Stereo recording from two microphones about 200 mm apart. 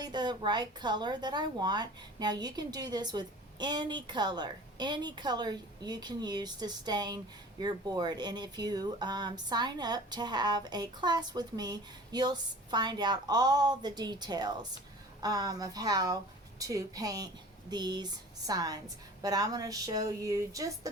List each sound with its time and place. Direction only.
0.0 s a woman's voice: 20° right (ahead or behind)